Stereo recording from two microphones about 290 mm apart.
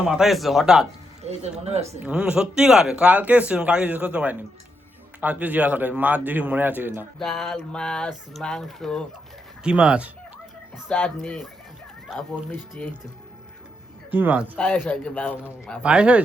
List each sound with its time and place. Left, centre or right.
0.0 s a man's voice: centre
1.2 s speech: right
2.0 s a man's voice: centre
14.1 s a man's voice: centre
14.5 s a man's voice: centre